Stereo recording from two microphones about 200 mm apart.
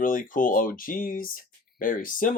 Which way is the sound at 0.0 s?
40° left (ahead or behind).